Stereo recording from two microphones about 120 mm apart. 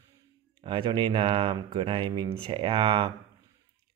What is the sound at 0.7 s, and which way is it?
Speech, 40° right (ahead or behind).